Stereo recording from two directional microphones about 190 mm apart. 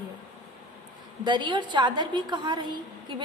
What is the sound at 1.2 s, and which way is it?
A woman's voice, 25° right (ahead or behind).